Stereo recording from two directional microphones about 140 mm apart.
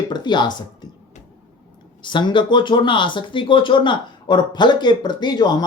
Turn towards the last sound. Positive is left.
turn(degrees=30)  # may be behind; listen again after turning